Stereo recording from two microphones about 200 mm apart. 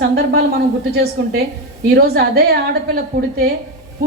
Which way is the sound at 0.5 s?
50° right (ahead or behind).